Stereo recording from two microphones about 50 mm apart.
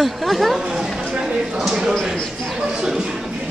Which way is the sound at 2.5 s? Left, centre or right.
Centre.